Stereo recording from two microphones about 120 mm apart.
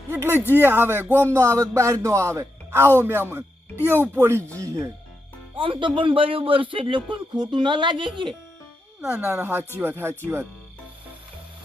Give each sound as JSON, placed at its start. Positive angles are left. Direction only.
{"t": 0.1, "sound": "speech", "side_deg": -20}
{"t": 5.5, "sound": "speech", "side_deg": -45}
{"t": 9.0, "sound": "speech", "side_deg": -20}